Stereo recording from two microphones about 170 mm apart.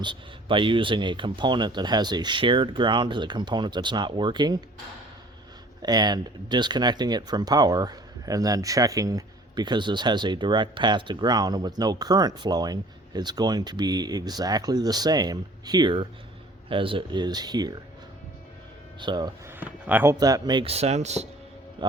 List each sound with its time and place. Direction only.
0.0 s speech: 30° right (ahead or behind)
5.8 s speech: 25° right (ahead or behind)
18.9 s speech: 25° right (ahead or behind)
19.5 s speech: 10° right (ahead or behind)
20.1 s speech: 20° right (ahead or behind); by 21.2 s 40° right (ahead or behind)
21.8 s a man's voice: 25° right (ahead or behind)